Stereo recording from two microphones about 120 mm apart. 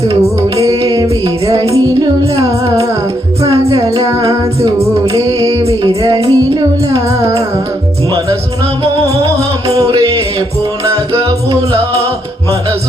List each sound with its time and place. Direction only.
0.2 s music: 25° right (ahead or behind)
3.7 s music: 30° right (ahead or behind)
6.2 s music: 45° right (ahead or behind)
9.0 s music: 30° right (ahead or behind)